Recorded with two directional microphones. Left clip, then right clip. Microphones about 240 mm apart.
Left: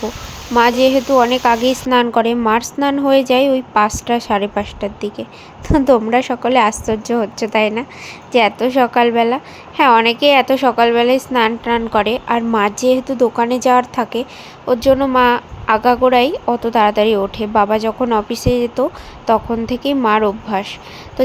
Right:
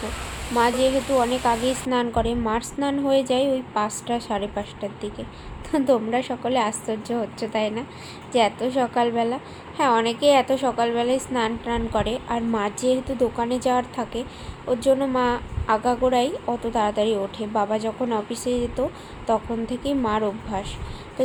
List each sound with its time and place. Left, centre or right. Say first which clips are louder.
0.5 s a woman's voice: left 8 dB; left
19.7 s speech: left 8 dB; left
20.0 s a woman's voice: left 11 dB; left